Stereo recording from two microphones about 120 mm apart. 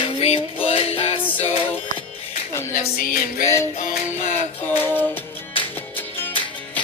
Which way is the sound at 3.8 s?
70° left (ahead or behind).